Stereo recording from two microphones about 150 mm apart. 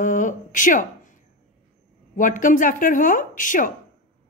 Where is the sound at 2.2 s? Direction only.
60° left (ahead or behind).